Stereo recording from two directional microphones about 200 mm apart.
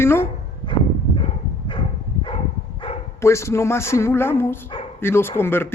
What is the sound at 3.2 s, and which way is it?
Speech, 15° left (ahead or behind).